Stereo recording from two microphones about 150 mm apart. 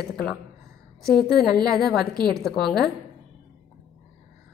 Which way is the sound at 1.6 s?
Centre (ahead or behind).